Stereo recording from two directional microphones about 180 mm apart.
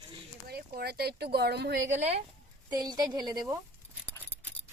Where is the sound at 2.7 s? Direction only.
20° right (ahead or behind).